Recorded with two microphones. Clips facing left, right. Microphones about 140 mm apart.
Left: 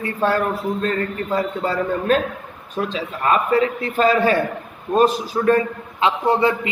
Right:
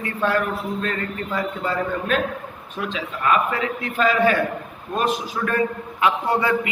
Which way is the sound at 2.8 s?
35° left (ahead or behind).